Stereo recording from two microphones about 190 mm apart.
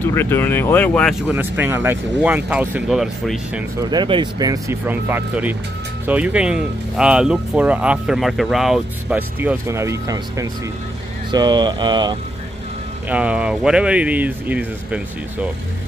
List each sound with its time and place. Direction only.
0.0 s speech: 10° left (ahead or behind)
1.2 s speech: 10° right (ahead or behind)
3.9 s speech: 25° right (ahead or behind)
11.3 s mantra: 25° right (ahead or behind)
13.1 s speech: 5° right (ahead or behind)